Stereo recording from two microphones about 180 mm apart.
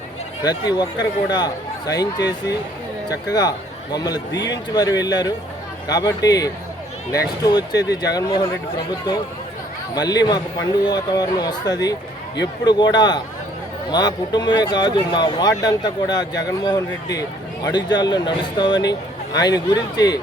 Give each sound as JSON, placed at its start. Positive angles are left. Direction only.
{"t": 0.4, "sound": "speech", "side_deg": 20}
{"t": 9.9, "sound": "speech", "side_deg": 20}